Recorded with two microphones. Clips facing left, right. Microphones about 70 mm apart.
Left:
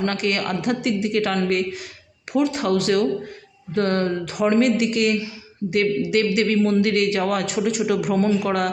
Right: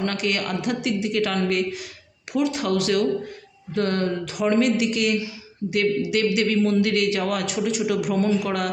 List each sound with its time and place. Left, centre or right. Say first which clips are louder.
0.0 s a man's voice: left 2 dB; left